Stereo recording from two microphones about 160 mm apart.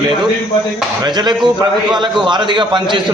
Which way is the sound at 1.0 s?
25° right (ahead or behind).